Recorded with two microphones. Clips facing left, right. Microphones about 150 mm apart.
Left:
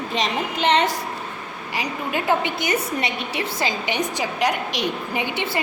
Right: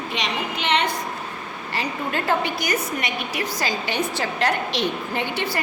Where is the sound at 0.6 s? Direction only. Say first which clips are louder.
Left 4 dB; 40° left (ahead or behind).